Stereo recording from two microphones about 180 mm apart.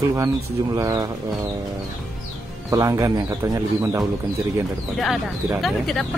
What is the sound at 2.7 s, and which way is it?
Speech, 15° right (ahead or behind).